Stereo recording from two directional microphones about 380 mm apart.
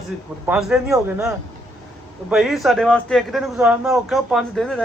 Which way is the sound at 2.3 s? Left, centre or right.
Centre.